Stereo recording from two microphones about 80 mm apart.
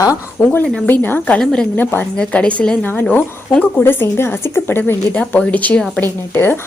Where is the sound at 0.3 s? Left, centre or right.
Left.